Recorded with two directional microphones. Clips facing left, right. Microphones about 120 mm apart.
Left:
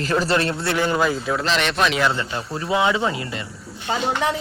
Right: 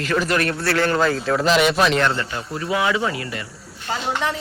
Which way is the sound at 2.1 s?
20° left (ahead or behind).